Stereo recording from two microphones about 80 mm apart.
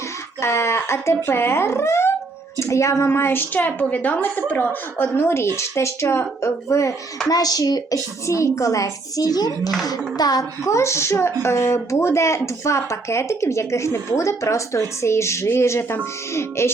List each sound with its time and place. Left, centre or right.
0.4 s a woman's voice: left
7.3 s a woman's voice: left
10.7 s speech: left